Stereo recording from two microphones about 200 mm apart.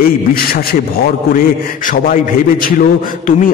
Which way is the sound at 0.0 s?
45° left (ahead or behind).